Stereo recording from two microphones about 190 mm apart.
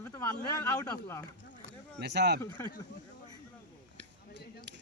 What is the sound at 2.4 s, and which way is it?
Speech, 20° left (ahead or behind).